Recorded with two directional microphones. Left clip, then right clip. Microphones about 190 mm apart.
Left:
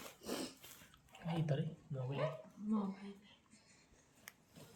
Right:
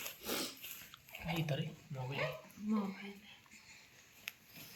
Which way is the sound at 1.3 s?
45° left (ahead or behind).